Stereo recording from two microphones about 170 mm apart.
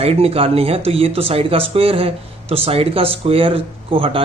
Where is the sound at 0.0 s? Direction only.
35° right (ahead or behind).